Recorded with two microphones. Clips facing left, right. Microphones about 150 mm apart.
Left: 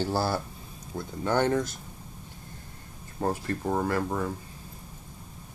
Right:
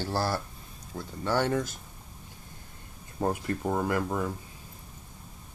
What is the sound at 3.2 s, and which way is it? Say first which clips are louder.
Speech: even; 10° right (ahead or behind).